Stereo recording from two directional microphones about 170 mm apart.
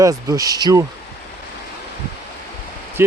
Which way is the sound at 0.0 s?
20° right (ahead or behind).